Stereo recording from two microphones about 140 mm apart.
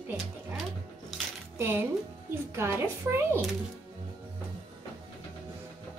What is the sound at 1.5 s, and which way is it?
Music, 15° right (ahead or behind).